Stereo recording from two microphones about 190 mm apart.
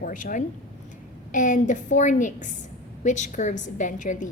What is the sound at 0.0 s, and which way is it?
A woman's voice, 45° left (ahead or behind).